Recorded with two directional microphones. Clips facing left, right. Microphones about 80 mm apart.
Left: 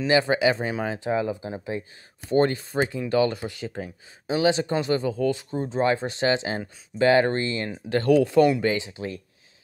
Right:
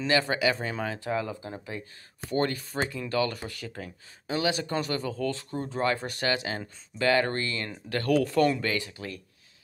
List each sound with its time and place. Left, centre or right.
0.0 s speech: centre